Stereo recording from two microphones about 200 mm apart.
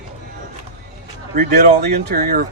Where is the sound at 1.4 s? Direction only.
55° right (ahead or behind).